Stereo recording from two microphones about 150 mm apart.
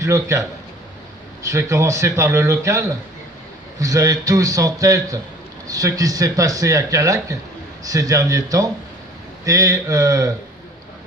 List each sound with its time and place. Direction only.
0.0 s speech: 20° right (ahead or behind)